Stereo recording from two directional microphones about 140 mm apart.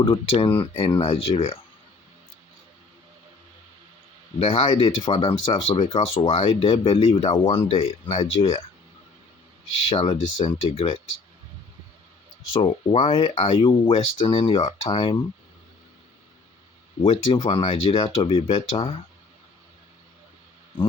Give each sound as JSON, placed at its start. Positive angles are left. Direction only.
{"t": 0.0, "sound": "speech", "side_deg": 40}
{"t": 4.4, "sound": "speech", "side_deg": 45}
{"t": 7.4, "sound": "speech", "side_deg": 30}
{"t": 7.8, "sound": "speech", "side_deg": 50}
{"t": 8.2, "sound": "speech", "side_deg": 40}
{"t": 9.8, "sound": "speech", "side_deg": 40}
{"t": 12.6, "sound": "speech", "side_deg": 45}
{"t": 17.0, "sound": "speech", "side_deg": 40}